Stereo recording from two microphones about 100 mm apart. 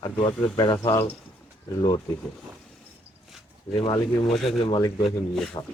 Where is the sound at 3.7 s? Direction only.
50° left (ahead or behind).